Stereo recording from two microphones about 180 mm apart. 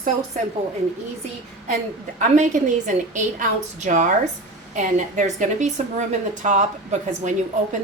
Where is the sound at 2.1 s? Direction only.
45° right (ahead or behind).